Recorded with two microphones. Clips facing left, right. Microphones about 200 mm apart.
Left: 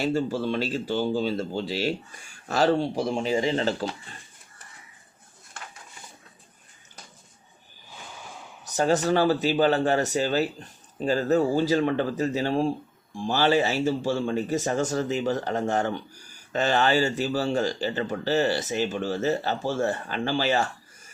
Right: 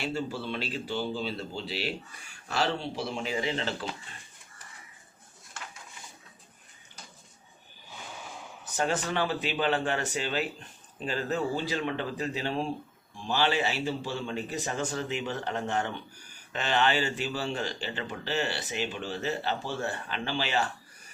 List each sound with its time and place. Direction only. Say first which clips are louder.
0.0 s speech: left 8 dB; 45° left (ahead or behind)
8.6 s speech: left 7 dB; 40° left (ahead or behind)